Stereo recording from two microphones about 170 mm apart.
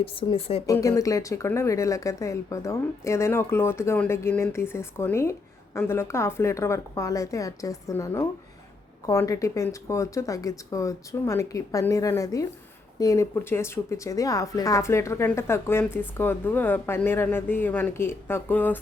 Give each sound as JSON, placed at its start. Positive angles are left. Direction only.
{"t": 0.0, "sound": "speech", "side_deg": 30}
{"t": 0.7, "sound": "speech", "side_deg": 20}